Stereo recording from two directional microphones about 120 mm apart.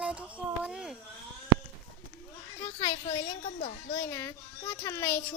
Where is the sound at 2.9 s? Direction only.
60° left (ahead or behind).